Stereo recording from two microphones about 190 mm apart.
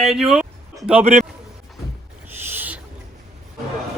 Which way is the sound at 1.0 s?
35° right (ahead or behind).